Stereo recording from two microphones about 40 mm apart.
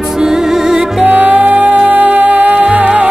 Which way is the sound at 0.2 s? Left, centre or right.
Centre.